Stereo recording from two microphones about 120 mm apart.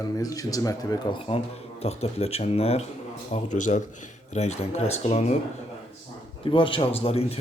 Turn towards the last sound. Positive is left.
turn(degrees=55)  # may be behind; listen again after turning